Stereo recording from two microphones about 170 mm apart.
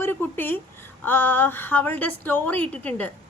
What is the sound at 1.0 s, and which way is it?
A woman's voice, 10° left (ahead or behind).